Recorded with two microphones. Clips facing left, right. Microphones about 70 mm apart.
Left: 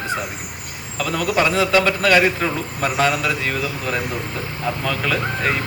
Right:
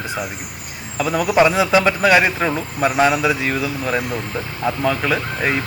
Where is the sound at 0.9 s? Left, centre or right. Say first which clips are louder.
Right 4 dB; centre.